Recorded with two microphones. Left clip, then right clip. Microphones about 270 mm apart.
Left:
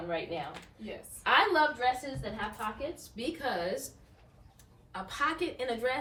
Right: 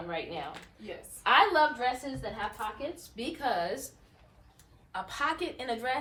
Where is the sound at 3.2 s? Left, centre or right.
Centre.